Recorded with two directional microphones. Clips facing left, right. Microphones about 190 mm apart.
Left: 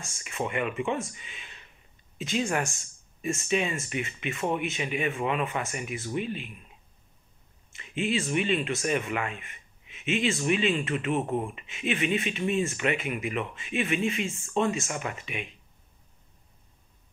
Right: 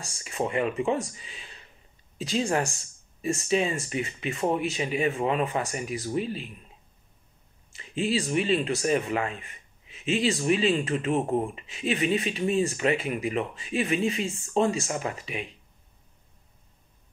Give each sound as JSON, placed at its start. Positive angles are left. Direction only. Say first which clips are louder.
{"t": 0.0, "sound": "speech", "louder": "right 3 dB", "side_deg": -35}
{"t": 7.7, "sound": "speech", "louder": "right 2 dB", "side_deg": -35}